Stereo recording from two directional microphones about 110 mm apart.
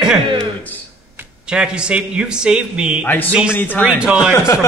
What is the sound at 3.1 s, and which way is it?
Speech, 15° left (ahead or behind).